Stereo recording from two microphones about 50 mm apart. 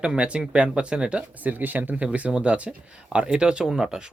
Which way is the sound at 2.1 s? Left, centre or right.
Right.